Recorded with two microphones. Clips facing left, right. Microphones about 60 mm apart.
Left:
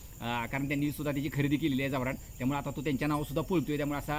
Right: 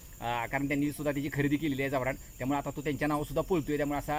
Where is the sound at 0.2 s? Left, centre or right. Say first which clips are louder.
Right 2 dB; right.